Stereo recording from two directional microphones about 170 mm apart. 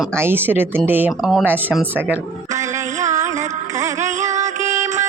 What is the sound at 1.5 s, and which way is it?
Speech, 10° right (ahead or behind).